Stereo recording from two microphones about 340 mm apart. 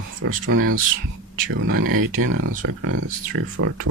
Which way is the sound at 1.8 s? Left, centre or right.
Right.